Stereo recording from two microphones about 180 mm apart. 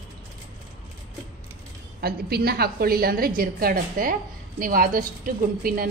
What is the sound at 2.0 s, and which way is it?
A woman's voice, 60° right (ahead or behind).